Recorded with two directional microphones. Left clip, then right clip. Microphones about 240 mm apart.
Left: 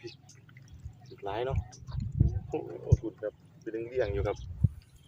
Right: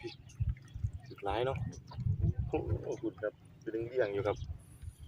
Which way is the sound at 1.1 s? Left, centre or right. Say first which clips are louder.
Even; centre.